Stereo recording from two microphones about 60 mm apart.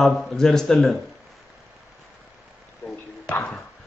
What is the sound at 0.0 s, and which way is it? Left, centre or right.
Speech, centre.